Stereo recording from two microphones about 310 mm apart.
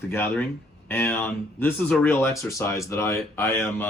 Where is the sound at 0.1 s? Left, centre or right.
Centre.